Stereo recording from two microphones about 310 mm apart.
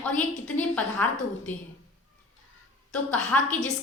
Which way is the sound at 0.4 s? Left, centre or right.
Centre.